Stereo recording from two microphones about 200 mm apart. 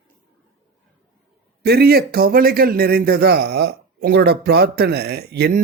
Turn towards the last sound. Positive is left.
turn(degrees=-55)  # may be behind; listen again after turning